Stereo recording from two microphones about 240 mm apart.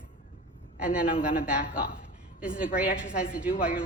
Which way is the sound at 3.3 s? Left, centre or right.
Centre.